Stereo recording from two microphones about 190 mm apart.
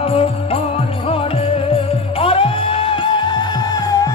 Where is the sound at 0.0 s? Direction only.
30° left (ahead or behind).